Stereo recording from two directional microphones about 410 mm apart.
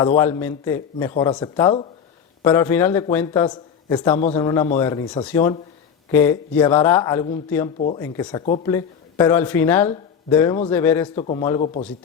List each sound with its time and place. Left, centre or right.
0.0 s speech: centre